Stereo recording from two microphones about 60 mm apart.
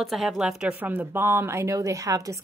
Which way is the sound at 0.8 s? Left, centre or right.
Right.